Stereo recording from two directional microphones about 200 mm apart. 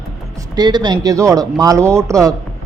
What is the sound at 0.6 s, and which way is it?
Speech, 20° right (ahead or behind).